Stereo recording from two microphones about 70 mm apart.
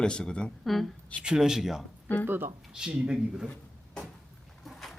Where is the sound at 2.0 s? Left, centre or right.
Left.